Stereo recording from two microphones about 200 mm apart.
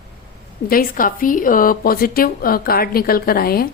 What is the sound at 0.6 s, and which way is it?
A woman's voice, 45° left (ahead or behind).